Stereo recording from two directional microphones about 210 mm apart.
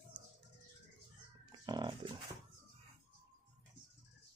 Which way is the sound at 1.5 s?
20° right (ahead or behind).